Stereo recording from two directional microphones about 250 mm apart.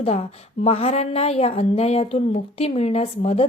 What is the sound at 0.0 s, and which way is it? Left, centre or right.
A woman's voice, left.